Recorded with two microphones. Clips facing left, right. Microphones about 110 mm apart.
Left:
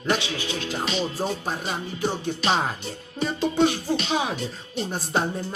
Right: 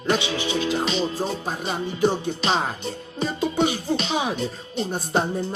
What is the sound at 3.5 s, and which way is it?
Speech, 20° right (ahead or behind).